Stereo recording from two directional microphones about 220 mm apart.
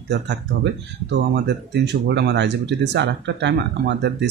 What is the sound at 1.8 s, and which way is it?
Speech, 50° right (ahead or behind).